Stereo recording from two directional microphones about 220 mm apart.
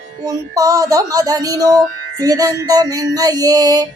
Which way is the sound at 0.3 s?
15° right (ahead or behind).